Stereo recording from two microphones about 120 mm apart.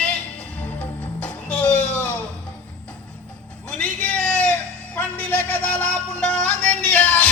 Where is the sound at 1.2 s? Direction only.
15° left (ahead or behind).